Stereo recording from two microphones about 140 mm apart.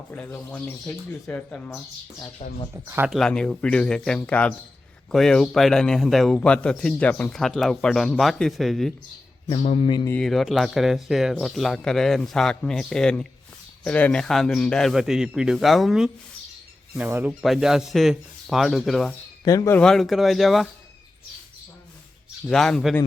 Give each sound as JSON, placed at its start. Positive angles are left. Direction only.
{"t": 0.1, "sound": "speech", "side_deg": 10}
{"t": 2.8, "sound": "speech", "side_deg": -15}
{"t": 3.1, "sound": "speech", "side_deg": 5}
{"t": 9.5, "sound": "speech", "side_deg": 45}
{"t": 10.2, "sound": "speech", "side_deg": 0}
{"t": 17.0, "sound": "speech", "side_deg": -15}
{"t": 17.4, "sound": "speech", "side_deg": 0}
{"t": 19.5, "sound": "speech", "side_deg": 25}
{"t": 19.7, "sound": "speech", "side_deg": 5}
{"t": 22.4, "sound": "speech", "side_deg": 5}